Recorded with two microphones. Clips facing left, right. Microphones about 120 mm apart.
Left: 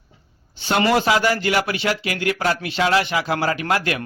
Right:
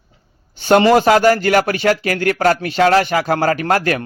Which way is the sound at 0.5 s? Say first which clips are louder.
Right 10 dB; 50° right (ahead or behind).